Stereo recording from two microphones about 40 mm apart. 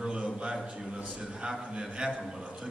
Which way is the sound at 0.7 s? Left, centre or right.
Right.